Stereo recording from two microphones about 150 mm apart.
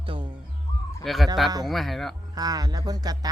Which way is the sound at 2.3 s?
25° right (ahead or behind).